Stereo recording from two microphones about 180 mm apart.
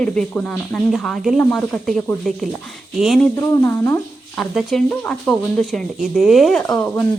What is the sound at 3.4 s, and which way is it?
Speech, 15° left (ahead or behind).